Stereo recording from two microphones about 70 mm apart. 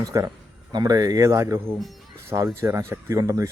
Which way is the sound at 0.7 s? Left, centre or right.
Right.